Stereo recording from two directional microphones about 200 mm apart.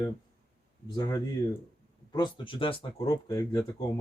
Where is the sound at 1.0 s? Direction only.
15° left (ahead or behind).